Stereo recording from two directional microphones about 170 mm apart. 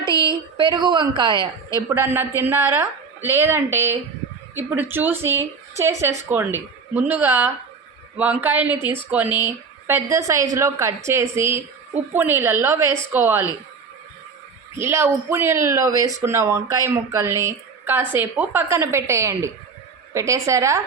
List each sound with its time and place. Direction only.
0.5 s speech: 25° right (ahead or behind)
1.9 s speech: 15° right (ahead or behind)
14.8 s speech: 15° right (ahead or behind)